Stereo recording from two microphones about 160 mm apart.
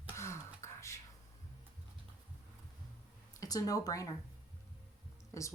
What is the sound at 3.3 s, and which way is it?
Speech, 20° left (ahead or behind).